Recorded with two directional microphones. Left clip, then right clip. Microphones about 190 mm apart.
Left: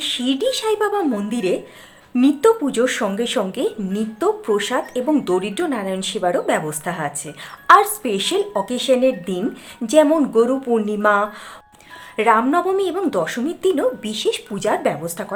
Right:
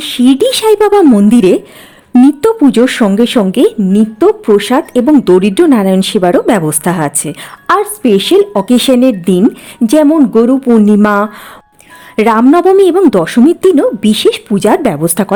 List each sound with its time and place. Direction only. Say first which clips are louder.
0.0 s speech: right 11 dB; 45° right (ahead or behind)
7.8 s a woman's voice: right 8 dB; 40° right (ahead or behind)